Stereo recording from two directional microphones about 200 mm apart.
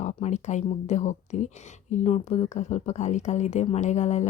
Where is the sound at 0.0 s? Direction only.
35° left (ahead or behind).